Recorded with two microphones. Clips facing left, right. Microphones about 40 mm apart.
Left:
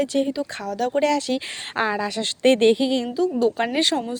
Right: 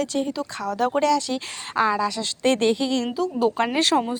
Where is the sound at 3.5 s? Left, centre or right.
Centre.